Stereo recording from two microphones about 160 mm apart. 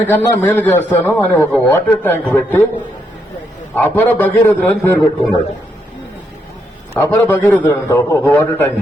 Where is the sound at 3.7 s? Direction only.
10° left (ahead or behind).